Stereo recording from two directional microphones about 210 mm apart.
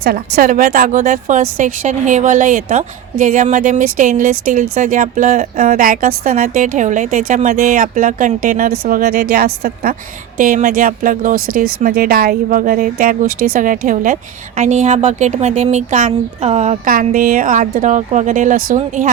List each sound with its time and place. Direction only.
0.0 s speech: 45° right (ahead or behind)